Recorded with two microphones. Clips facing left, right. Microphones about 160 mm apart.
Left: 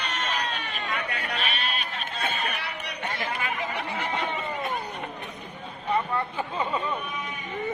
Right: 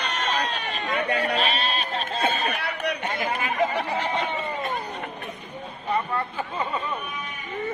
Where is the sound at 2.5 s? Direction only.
60° right (ahead or behind).